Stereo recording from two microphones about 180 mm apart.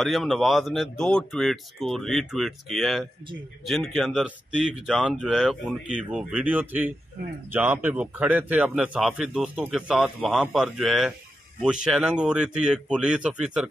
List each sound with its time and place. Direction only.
0.0 s a man's voice: centre (ahead or behind)